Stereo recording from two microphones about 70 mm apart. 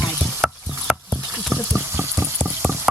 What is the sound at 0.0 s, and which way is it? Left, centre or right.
Mechanisms, centre.